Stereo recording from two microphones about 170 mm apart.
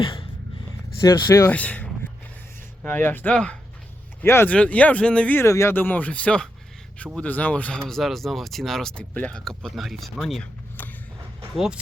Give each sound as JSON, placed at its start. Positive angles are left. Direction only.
{"t": 0.0, "sound": "a sound", "side_deg": 30}
{"t": 1.0, "sound": "speech", "side_deg": 20}
{"t": 1.5, "sound": "speech", "side_deg": 10}
{"t": 11.5, "sound": "speech", "side_deg": -5}